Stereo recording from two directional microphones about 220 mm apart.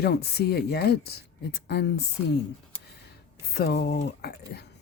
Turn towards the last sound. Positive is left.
turn(degrees=45)  # may be behind; listen again after turning